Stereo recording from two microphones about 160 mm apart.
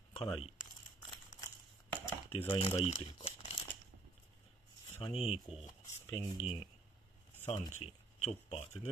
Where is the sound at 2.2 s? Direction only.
35° left (ahead or behind).